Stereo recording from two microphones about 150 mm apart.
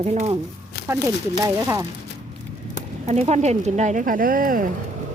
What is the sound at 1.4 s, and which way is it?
Speech, 20° right (ahead or behind).